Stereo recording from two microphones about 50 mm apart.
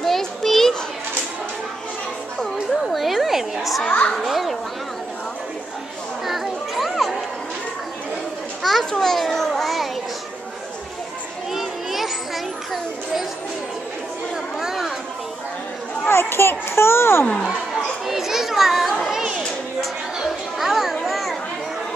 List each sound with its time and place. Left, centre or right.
0.0 s children playing: centre
2.4 s a sound: centre
4.1 s children playing: centre
6.2 s children playing: centre
8.6 s children playing: centre
11.5 s children playing: centre
14.6 s chatter: centre
16.1 s a sound: left
18.0 s children playing: centre
20.5 s children playing: centre